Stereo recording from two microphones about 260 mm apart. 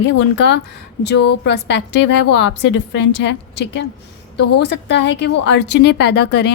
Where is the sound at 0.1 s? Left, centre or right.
Left.